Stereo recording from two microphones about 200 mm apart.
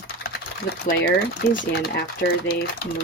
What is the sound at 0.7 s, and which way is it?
Speech, 55° left (ahead or behind).